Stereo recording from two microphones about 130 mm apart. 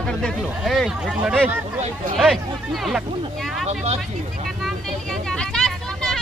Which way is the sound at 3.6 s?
55° right (ahead or behind).